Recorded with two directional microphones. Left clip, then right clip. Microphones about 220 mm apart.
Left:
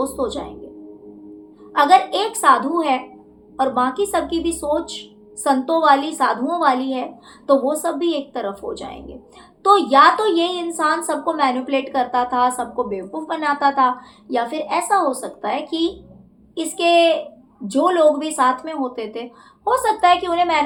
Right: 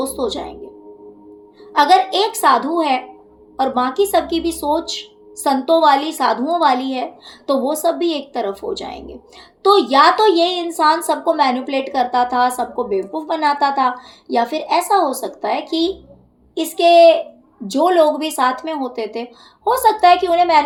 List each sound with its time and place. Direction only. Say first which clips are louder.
0.0 s music: right 1 dB; 45° right (ahead or behind)
1.7 s a woman's voice: right 1 dB; 45° right (ahead or behind)